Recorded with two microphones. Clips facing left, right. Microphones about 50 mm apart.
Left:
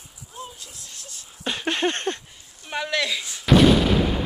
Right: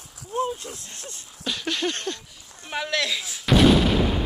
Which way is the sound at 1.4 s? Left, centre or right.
Left.